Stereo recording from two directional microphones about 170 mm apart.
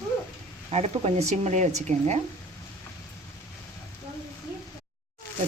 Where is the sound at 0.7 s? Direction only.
35° right (ahead or behind).